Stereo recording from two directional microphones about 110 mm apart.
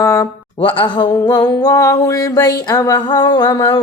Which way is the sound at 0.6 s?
50° left (ahead or behind).